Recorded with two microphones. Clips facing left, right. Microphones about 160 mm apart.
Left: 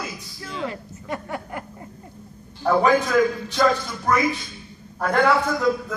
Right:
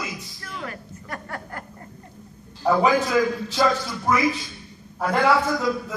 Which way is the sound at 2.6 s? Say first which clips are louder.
Left 1 dB; 5° right (ahead or behind).